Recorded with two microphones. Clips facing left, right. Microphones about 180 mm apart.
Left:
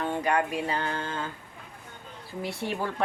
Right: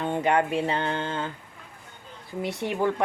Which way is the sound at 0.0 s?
20° right (ahead or behind).